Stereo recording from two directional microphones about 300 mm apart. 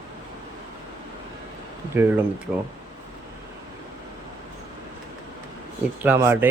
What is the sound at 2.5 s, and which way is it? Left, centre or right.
Speech, centre.